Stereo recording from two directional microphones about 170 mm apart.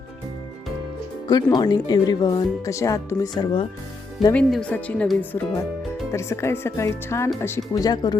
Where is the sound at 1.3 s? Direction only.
25° left (ahead or behind).